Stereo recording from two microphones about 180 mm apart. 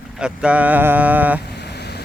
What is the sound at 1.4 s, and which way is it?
Vehicle, 65° left (ahead or behind).